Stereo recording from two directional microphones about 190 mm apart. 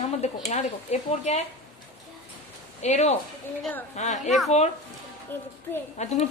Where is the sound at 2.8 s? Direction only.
35° left (ahead or behind).